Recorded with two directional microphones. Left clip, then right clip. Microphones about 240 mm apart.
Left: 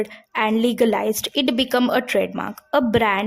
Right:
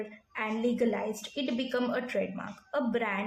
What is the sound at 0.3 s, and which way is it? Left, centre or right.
A woman's voice, left.